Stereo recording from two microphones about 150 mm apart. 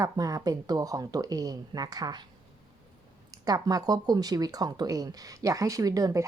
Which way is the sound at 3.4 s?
25° right (ahead or behind).